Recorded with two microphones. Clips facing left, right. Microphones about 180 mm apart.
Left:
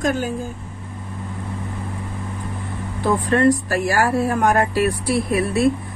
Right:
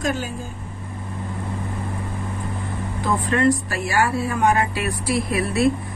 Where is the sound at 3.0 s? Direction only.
40° left (ahead or behind).